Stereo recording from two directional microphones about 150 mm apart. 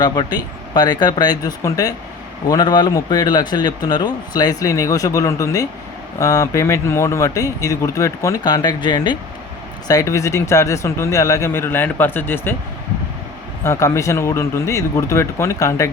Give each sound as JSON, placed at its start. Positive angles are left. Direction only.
{"t": 0.0, "sound": "a man's voice", "side_deg": 25}
{"t": 13.7, "sound": "a man's voice", "side_deg": 20}